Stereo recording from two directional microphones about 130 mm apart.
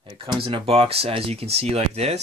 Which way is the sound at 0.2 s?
40° right (ahead or behind).